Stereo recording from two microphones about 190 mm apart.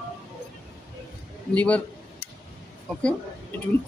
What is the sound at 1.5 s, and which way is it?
Speech, 5° left (ahead or behind).